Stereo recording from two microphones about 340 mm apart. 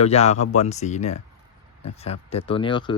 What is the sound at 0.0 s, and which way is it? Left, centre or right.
Speech, centre.